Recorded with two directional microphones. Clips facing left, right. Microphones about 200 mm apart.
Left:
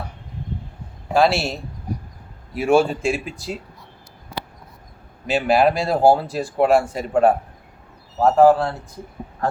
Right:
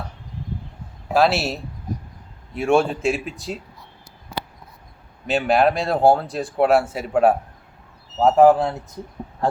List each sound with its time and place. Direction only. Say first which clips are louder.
1.1 s speech: left 1 dB; centre (ahead or behind)
5.2 s speech: left 1 dB; centre (ahead or behind)
8.2 s a man's voice: even; 20° right (ahead or behind)